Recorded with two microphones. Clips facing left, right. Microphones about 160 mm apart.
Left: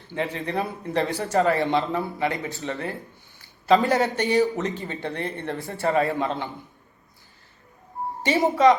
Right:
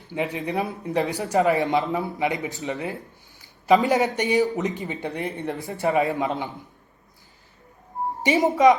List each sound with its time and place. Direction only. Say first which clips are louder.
0.1 s a man's voice: right 1 dB; 15° right (ahead or behind)
8.2 s speech: right 1 dB; 20° right (ahead or behind)